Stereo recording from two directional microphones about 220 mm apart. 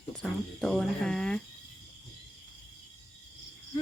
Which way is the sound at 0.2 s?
5° left (ahead or behind).